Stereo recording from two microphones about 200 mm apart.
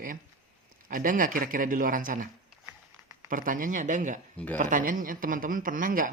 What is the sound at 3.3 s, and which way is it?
A man's voice, 40° right (ahead or behind).